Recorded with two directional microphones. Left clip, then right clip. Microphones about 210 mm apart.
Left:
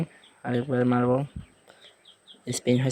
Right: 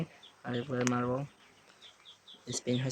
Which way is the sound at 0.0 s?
30° left (ahead or behind).